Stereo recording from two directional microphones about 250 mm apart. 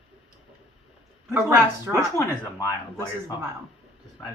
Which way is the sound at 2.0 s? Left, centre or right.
Centre.